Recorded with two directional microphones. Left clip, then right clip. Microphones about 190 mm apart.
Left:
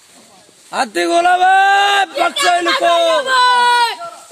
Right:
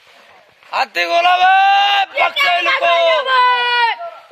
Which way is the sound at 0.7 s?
40° left (ahead or behind).